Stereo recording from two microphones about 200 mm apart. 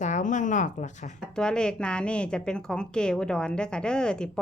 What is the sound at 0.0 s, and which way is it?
Speech, 40° left (ahead or behind).